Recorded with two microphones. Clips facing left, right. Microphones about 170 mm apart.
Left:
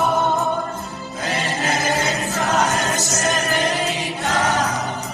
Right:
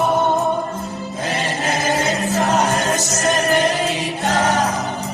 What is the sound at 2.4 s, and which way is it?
Choir, 30° right (ahead or behind).